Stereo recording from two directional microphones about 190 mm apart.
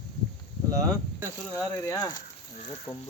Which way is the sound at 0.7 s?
20° right (ahead or behind).